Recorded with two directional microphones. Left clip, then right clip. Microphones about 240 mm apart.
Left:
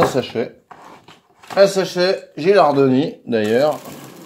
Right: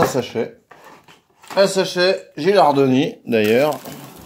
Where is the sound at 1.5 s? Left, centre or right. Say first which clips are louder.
Left 2 dB; right.